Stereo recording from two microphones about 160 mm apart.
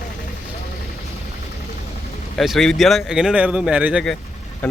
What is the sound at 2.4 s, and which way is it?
Speech, centre (ahead or behind).